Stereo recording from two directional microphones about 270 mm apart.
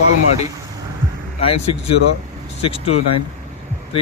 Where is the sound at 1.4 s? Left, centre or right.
Left.